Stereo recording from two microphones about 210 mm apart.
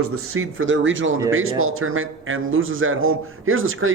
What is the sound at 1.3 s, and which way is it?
Speech, 75° right (ahead or behind).